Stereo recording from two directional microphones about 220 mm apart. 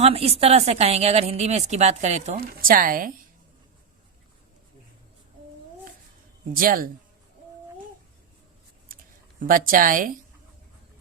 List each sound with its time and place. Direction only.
0.0 s a woman's voice: 25° right (ahead or behind)
6.5 s a woman's voice: 40° right (ahead or behind)
9.4 s a woman's voice: 40° right (ahead or behind)